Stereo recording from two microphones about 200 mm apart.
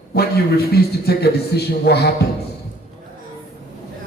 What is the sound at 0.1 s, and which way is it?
A man's voice, 50° left (ahead or behind).